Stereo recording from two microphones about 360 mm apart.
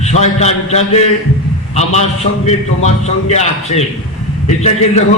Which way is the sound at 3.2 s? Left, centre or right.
Centre.